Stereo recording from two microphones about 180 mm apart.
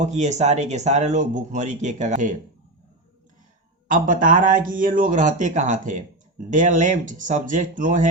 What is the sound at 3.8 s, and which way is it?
Speech, 45° right (ahead or behind).